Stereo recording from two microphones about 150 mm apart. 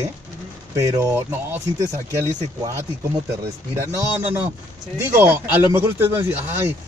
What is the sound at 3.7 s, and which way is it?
Speech, 15° right (ahead or behind).